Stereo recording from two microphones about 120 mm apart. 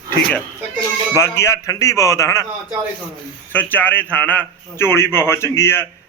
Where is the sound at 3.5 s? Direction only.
15° left (ahead or behind).